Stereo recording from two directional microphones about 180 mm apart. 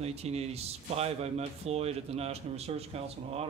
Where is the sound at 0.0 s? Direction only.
35° right (ahead or behind).